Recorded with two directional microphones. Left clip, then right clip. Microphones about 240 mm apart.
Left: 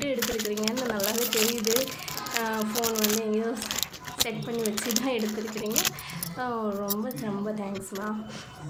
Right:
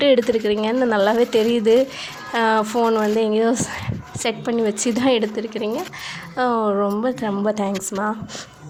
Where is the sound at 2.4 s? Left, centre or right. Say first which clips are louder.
Right 12 dB; right.